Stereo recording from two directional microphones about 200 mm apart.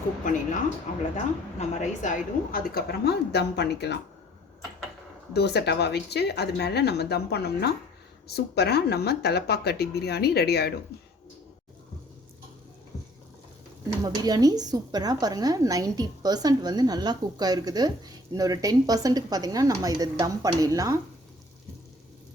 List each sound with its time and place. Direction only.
1.1 s a woman's voice: 35° left (ahead or behind); by 3.9 s 55° left (ahead or behind)
5.3 s a woman's voice: 55° left (ahead or behind)
14.0 s speech: 20° right (ahead or behind)